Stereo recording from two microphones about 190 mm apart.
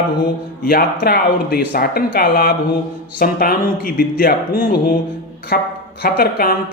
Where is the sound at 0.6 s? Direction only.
50° left (ahead or behind).